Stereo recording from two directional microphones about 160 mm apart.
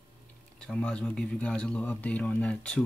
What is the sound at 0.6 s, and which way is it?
Speech, 5° left (ahead or behind).